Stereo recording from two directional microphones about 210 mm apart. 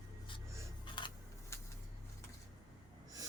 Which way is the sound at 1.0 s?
20° left (ahead or behind).